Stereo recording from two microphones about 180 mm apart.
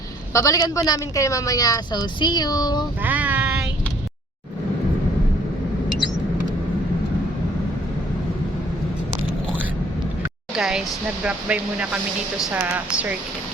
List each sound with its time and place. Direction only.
0.3 s a woman's voice: 20° left (ahead or behind)
3.0 s child singing: 10° right (ahead or behind)
10.5 s speech: 5° right (ahead or behind)